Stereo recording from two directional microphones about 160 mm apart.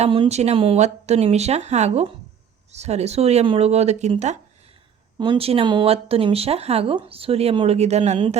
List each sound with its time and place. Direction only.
0.0 s speech: 35° right (ahead or behind)
5.1 s speech: 30° right (ahead or behind)